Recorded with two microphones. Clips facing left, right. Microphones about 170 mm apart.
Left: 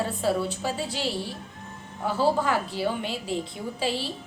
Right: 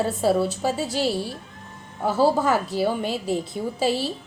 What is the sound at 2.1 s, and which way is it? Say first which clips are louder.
A woman's voice: right 4 dB; 40° right (ahead or behind).